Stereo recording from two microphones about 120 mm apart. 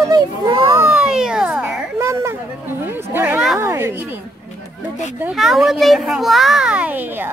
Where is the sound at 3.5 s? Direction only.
25° right (ahead or behind).